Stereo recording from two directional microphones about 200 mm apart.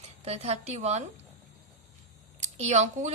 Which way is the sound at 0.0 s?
30° right (ahead or behind).